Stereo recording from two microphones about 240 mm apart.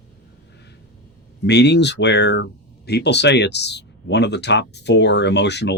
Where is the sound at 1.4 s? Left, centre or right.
Left.